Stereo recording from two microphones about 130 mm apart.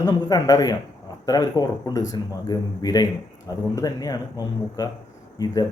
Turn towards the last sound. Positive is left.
turn(degrees=30)  # may be behind; listen again after turning